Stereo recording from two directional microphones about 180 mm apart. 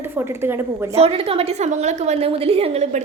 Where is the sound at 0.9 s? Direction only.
35° right (ahead or behind).